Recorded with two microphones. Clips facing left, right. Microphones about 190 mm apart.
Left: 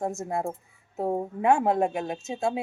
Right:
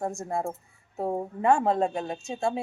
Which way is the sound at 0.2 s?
5° left (ahead or behind).